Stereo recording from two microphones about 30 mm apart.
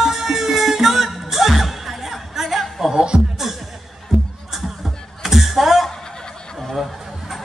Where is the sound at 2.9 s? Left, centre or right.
Right.